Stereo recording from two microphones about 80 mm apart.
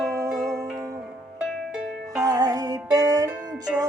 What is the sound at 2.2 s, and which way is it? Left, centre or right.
Music, right.